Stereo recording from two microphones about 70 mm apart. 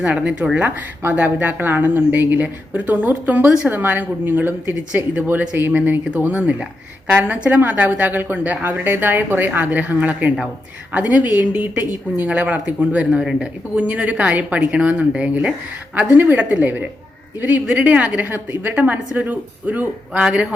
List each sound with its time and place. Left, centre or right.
0.0 s a woman's voice: centre
13.1 s a woman's voice: centre